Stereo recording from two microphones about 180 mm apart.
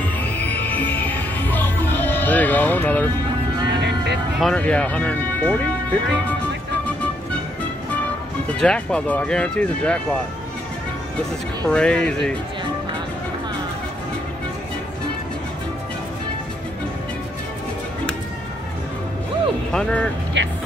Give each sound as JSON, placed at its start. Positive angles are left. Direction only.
{"t": 0.9, "sound": "music", "side_deg": 10}
{"t": 3.8, "sound": "vehicle", "side_deg": -70}
{"t": 4.4, "sound": "speech", "side_deg": 5}
{"t": 8.5, "sound": "speech", "side_deg": 5}
{"t": 11.6, "sound": "speech", "side_deg": 5}
{"t": 19.7, "sound": "speech", "side_deg": 5}
{"t": 20.4, "sound": "music", "side_deg": -85}